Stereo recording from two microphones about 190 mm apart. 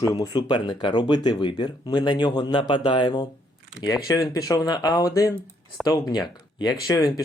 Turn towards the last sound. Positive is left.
turn(degrees=20)  # may be behind; listen again after turning